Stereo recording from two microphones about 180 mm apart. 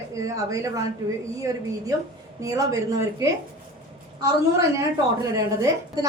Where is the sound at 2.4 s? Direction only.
20° right (ahead or behind).